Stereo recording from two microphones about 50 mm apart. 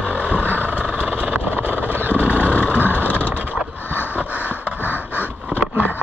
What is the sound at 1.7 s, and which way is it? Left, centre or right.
Vehicle, right.